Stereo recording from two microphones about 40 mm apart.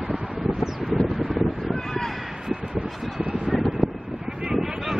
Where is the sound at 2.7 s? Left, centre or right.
Right.